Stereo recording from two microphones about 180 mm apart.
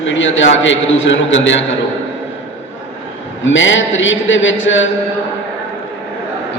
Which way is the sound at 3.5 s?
90° left.